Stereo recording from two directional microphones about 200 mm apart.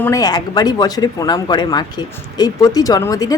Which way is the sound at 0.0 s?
15° left (ahead or behind).